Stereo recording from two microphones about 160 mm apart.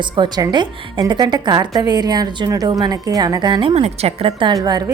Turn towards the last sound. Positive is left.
turn(degrees=-25)  # may be behind; listen again after turning